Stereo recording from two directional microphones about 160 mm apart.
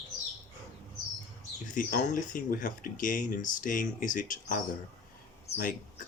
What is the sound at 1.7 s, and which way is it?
Speech, 55° left (ahead or behind).